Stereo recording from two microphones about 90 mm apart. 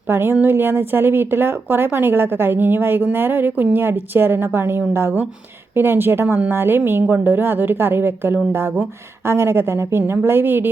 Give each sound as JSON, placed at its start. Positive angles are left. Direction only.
{"t": 0.1, "sound": "a woman's voice", "side_deg": -25}